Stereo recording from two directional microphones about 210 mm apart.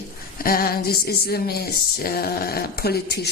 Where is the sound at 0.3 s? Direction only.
45° left (ahead or behind).